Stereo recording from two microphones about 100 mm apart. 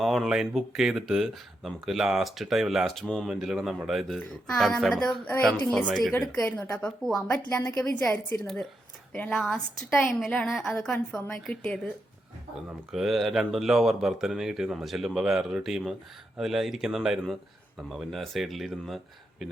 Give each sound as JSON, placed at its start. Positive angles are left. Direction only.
{"t": 0.0, "sound": "a woman's voice", "side_deg": 0}
{"t": 7.6, "sound": "a woman's voice", "side_deg": 30}
{"t": 7.9, "sound": "a woman's voice", "side_deg": 10}
{"t": 9.4, "sound": "a woman's voice", "side_deg": 0}
{"t": 12.9, "sound": "speech", "side_deg": 0}